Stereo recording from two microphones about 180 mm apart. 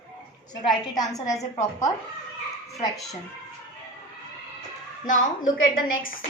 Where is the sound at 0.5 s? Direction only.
20° left (ahead or behind).